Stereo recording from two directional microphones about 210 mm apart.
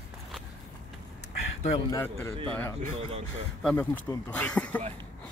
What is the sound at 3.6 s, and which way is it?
Speech, 10° left (ahead or behind).